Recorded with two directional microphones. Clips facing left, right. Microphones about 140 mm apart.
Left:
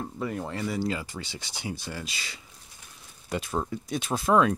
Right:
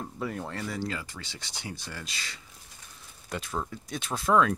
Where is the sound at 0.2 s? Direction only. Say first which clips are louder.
Left 3 dB; 5° left (ahead or behind).